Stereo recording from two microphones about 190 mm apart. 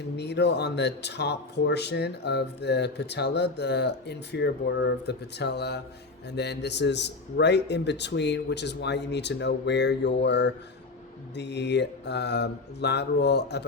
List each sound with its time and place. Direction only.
0.2 s speech: 65° left (ahead or behind)